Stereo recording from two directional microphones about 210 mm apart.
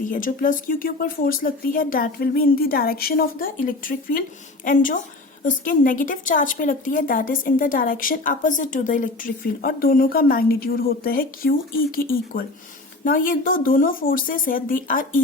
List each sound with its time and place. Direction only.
0.1 s a woman's voice: 40° left (ahead or behind)